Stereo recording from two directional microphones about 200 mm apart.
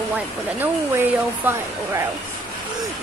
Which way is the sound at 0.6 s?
10° right (ahead or behind).